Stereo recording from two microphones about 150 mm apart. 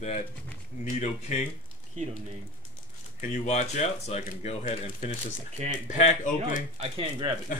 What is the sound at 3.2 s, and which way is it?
Speech, 55° left (ahead or behind).